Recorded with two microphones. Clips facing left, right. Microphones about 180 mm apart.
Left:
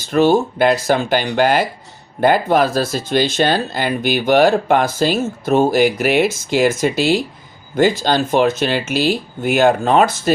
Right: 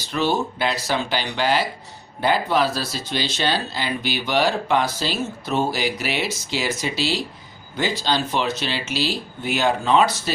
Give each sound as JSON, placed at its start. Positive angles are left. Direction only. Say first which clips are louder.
{"t": 0.1, "sound": "speech", "louder": "left 9 dB", "side_deg": 50}